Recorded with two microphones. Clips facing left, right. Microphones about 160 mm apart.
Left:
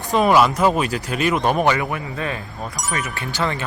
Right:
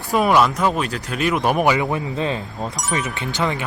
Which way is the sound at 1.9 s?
25° right (ahead or behind).